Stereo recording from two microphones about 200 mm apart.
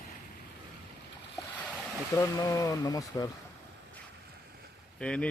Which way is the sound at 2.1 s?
15° left (ahead or behind).